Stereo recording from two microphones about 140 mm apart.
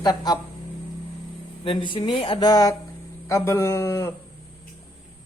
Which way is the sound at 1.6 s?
35° left (ahead or behind).